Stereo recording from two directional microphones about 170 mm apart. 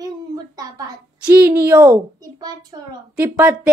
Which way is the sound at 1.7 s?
15° right (ahead or behind).